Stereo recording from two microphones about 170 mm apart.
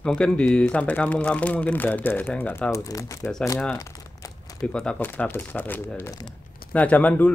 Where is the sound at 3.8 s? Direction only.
20° left (ahead or behind).